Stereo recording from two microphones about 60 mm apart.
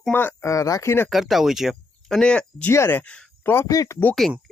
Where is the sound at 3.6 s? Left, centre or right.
Left.